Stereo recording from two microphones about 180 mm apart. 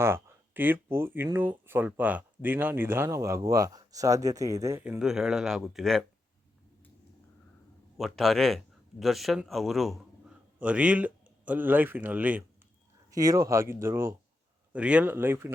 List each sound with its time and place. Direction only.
0.0 s speech: 15° right (ahead or behind)
7.9 s speech: centre (ahead or behind)